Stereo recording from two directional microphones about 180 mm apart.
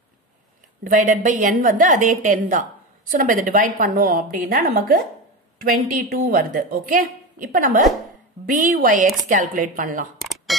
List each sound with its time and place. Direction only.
0.8 s a woman's voice: 45° right (ahead or behind)